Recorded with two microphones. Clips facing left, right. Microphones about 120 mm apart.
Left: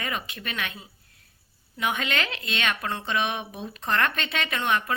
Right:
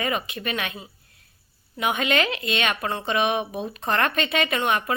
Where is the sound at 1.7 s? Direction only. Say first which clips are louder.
Right 5 dB; 15° right (ahead or behind).